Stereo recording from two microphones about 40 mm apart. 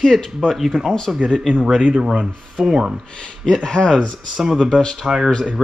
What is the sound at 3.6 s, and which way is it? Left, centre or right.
Speech, centre.